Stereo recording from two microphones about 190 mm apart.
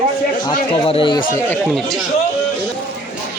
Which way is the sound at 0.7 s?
30° left (ahead or behind).